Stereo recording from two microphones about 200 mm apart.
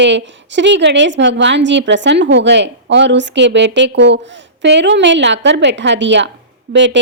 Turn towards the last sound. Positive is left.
turn(degrees=-65)  # may be behind; listen again after turning